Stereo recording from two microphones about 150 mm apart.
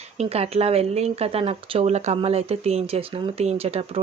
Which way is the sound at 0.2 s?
40° right (ahead or behind).